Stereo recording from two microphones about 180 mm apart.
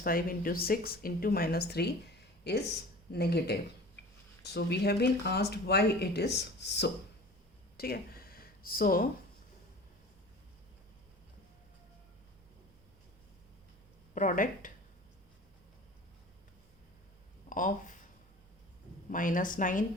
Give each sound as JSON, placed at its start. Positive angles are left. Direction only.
{"t": 0.0, "sound": "speech", "side_deg": 55}
{"t": 7.8, "sound": "a sound", "side_deg": 60}
{"t": 14.1, "sound": "a woman's voice", "side_deg": 45}
{"t": 17.5, "sound": "speech", "side_deg": 45}
{"t": 19.1, "sound": "a woman's voice", "side_deg": 45}